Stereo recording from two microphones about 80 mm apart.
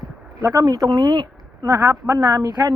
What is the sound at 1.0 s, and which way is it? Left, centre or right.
Speech, right.